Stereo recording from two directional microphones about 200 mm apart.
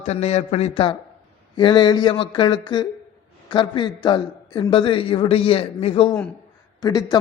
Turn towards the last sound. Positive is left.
turn(degrees=20)  # may be behind; listen again after turning